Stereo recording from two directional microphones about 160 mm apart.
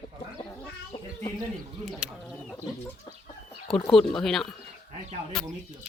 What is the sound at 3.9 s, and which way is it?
Speech, centre (ahead or behind).